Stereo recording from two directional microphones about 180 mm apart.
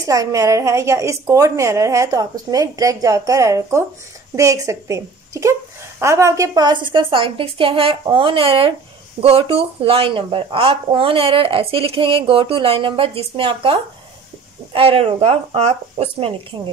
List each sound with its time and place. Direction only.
0.0 s a woman's voice: 20° right (ahead or behind)